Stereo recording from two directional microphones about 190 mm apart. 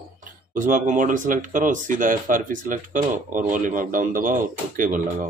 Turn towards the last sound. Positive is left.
turn(degrees=-45)  # may be behind; listen again after turning